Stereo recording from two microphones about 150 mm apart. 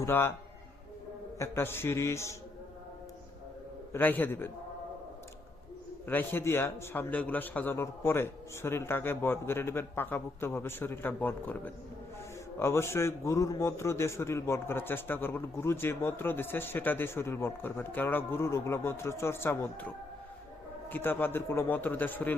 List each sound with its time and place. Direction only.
0.0 s a man's voice: 15° left (ahead or behind)
1.4 s a man's voice: 15° left (ahead or behind)
3.9 s a man's voice: 10° left (ahead or behind)
6.1 s a man's voice: 15° left (ahead or behind)
20.9 s a man's voice: 15° left (ahead or behind)